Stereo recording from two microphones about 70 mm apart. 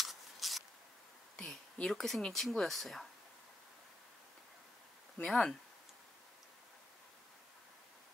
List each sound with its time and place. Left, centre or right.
0.0 s a sound: centre
1.3 s speech: centre
5.2 s speech: centre